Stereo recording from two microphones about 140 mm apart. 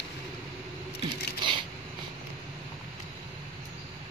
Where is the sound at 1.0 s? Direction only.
35° right (ahead or behind).